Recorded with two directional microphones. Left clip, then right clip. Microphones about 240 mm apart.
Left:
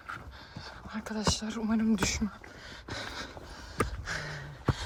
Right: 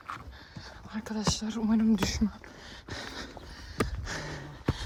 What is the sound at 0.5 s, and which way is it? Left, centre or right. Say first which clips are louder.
Speech: even; centre.